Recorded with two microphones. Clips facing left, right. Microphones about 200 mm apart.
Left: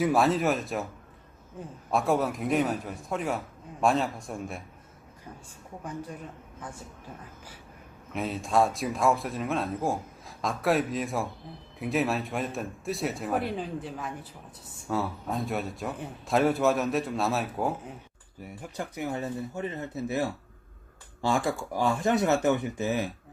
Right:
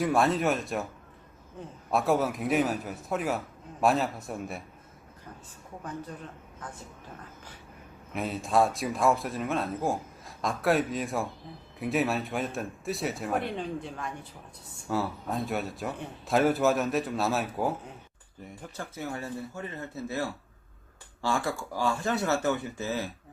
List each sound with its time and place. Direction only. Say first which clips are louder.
0.0 s a man's voice: left 1 dB; centre (ahead or behind)
1.9 s a man's voice: even; centre (ahead or behind)
5.8 s speech: left 1 dB; 10° left (ahead or behind)
8.1 s a man's voice: even; centre (ahead or behind)
18.6 s speech: left 4 dB; 15° left (ahead or behind)